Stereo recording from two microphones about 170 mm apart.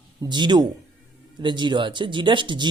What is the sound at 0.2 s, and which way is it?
Speech, 25° right (ahead or behind).